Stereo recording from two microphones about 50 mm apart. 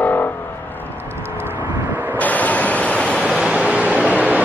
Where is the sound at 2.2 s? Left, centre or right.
Left.